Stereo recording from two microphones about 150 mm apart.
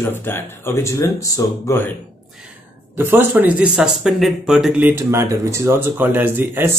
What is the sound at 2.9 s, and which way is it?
Speech, 15° right (ahead or behind).